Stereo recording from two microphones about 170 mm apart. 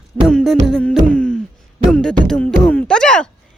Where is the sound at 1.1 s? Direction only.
5° left (ahead or behind).